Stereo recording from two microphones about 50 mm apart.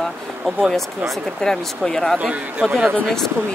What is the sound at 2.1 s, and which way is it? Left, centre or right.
Speech, right.